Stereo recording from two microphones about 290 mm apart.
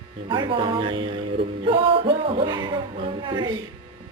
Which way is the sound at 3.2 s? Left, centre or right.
Centre.